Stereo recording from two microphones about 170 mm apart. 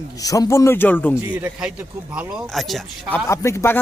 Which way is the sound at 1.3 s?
5° right (ahead or behind).